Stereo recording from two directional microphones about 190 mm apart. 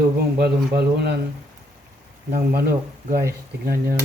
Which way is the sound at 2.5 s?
55° right (ahead or behind).